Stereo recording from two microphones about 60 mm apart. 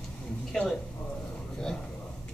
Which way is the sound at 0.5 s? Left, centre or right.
Centre.